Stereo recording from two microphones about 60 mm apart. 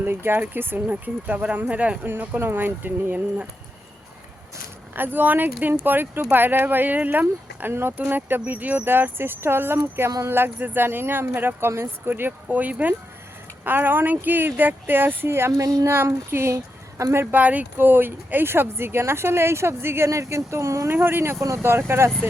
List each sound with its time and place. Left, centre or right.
0.0 s speech: right
2.0 s speech: right
4.9 s speech: right
15.6 s speech: right
15.9 s speech: right
17.3 s speech: right
20.1 s speech: right
20.9 s speech: right